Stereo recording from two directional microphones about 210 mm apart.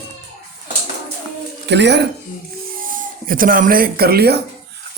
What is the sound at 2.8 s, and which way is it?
Speech, 40° right (ahead or behind).